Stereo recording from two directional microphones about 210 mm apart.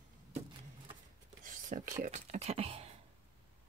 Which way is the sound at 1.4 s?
40° right (ahead or behind).